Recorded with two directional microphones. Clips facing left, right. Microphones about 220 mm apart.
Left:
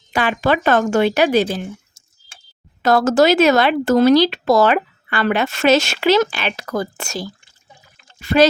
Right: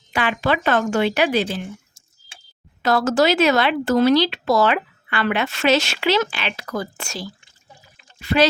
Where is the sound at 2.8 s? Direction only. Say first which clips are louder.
Left 4 dB; 45° left (ahead or behind).